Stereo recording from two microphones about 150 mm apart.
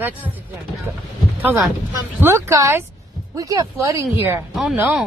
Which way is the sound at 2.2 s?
20° right (ahead or behind).